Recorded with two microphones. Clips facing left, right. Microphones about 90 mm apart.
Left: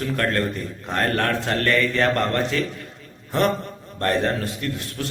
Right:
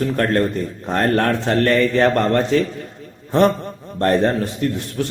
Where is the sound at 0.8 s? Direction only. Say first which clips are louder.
Right 5 dB; 30° right (ahead or behind).